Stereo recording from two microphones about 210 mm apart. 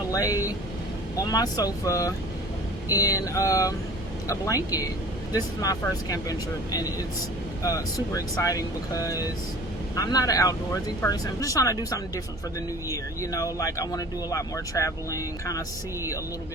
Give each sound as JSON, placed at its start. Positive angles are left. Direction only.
{"t": 0.1, "sound": "speech", "side_deg": 15}
{"t": 13.3, "sound": "speech", "side_deg": 15}